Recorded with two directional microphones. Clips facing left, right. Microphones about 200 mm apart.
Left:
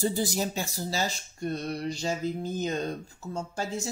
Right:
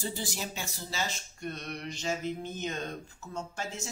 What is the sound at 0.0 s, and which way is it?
Speech, 40° left (ahead or behind).